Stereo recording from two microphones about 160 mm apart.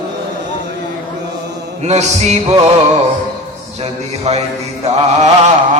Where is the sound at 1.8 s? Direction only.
45° right (ahead or behind).